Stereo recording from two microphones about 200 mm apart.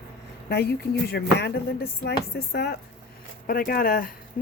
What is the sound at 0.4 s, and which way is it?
Speech, 55° left (ahead or behind).